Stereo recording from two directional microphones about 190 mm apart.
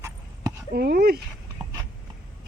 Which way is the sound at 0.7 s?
50° right (ahead or behind).